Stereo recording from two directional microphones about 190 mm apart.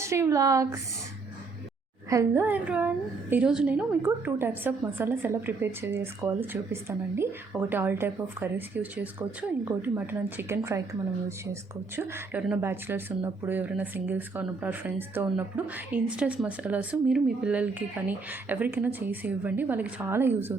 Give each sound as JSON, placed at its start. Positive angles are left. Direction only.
{"t": 0.0, "sound": "a woman's voice", "side_deg": -15}
{"t": 2.0, "sound": "a woman's voice", "side_deg": -15}
{"t": 11.9, "sound": "a woman's voice", "side_deg": -10}